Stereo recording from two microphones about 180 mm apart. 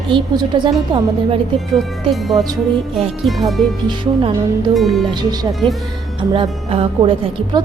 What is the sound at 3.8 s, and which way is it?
Speech, 25° right (ahead or behind).